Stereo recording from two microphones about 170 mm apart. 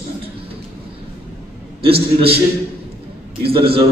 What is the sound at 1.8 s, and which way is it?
Speech, 35° right (ahead or behind).